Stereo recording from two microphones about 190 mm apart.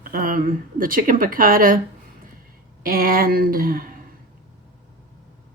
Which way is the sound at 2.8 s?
50° right (ahead or behind).